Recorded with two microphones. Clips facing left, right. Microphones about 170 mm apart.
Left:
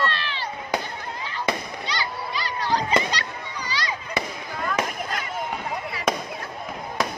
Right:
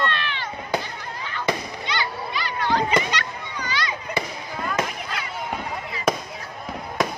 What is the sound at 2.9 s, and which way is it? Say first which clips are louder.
Children playing: right 1 dB; 35° left (ahead or behind).